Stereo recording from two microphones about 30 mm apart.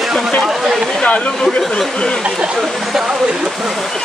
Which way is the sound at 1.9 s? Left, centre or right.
Left.